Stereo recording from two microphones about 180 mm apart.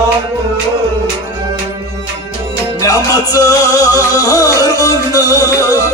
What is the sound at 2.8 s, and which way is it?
Music, 20° left (ahead or behind).